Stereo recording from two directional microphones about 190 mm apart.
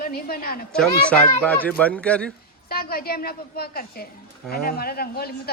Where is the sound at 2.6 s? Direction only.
55° left (ahead or behind).